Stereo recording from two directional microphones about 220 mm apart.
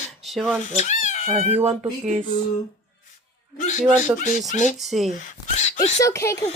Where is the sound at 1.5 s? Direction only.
30° right (ahead or behind).